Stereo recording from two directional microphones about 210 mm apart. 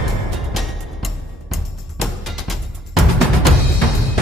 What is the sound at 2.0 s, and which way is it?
Music, centre (ahead or behind).